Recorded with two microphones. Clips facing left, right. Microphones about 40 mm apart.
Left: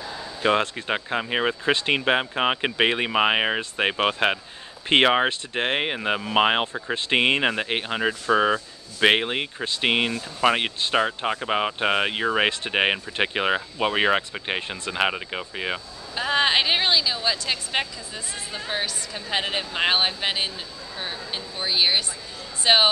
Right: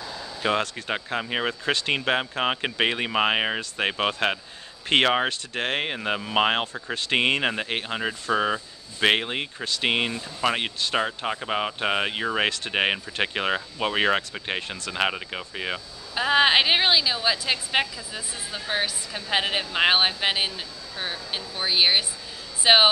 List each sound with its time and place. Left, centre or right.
0.4 s speech: centre
1.6 s speech: left
16.2 s a woman's voice: centre